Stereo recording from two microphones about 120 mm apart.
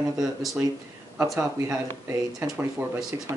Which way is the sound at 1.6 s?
20° right (ahead or behind).